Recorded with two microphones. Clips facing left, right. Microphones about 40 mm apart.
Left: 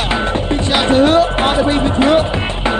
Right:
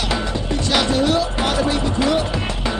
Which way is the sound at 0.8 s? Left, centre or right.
Left.